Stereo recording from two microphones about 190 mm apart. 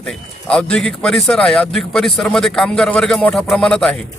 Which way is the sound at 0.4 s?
5° left (ahead or behind).